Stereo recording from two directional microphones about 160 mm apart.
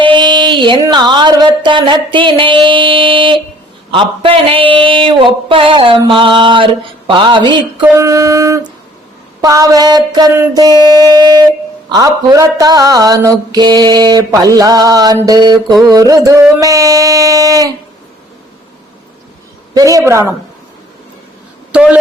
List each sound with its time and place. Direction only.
0.0 s music: 30° right (ahead or behind)
3.9 s speech: 35° right (ahead or behind)
7.1 s mantra: 30° right (ahead or behind)
19.7 s mantra: 20° right (ahead or behind)
21.7 s speech: 5° right (ahead or behind)